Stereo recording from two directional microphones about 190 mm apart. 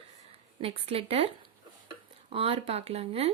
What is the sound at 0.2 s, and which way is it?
Speech, 30° right (ahead or behind).